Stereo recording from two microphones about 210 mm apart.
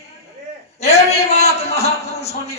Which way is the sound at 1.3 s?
30° left (ahead or behind).